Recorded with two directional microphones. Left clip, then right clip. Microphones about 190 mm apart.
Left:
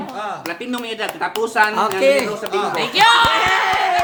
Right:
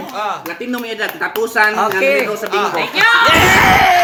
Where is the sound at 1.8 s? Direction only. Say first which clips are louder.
Right 2 dB; 70° left (ahead or behind).